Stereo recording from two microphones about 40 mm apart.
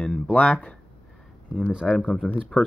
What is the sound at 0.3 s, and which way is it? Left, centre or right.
Speech, left.